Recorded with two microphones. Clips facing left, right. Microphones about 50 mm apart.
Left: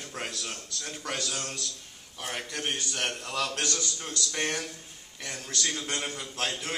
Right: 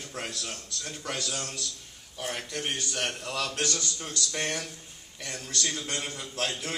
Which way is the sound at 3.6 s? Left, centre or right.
Centre.